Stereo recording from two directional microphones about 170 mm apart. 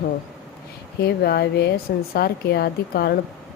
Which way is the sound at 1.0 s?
70° left (ahead or behind).